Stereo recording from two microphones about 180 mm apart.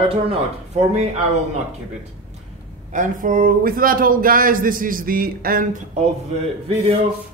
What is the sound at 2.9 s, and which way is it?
Speech, 45° right (ahead or behind).